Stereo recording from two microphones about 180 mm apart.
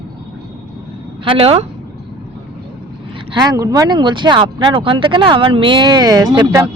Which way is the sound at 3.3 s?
20° right (ahead or behind).